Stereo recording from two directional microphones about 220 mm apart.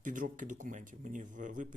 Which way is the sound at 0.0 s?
35° right (ahead or behind).